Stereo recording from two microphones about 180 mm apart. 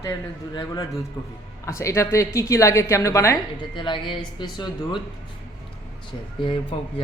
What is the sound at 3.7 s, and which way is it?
Speech, 25° left (ahead or behind).